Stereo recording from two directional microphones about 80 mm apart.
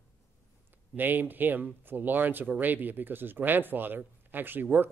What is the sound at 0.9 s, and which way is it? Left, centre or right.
Speech, right.